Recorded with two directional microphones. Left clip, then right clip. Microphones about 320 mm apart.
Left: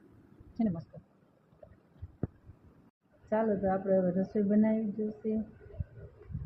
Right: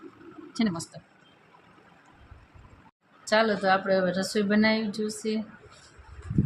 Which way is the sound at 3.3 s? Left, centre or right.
Centre.